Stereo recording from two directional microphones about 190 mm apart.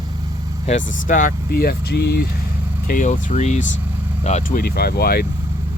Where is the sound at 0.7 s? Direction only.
45° left (ahead or behind).